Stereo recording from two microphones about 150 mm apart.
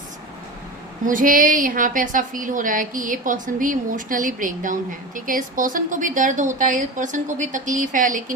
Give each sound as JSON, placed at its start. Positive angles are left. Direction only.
{"t": 1.0, "sound": "a woman's voice", "side_deg": -65}